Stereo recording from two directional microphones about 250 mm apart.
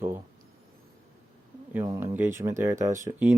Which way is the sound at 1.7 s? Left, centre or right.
Centre.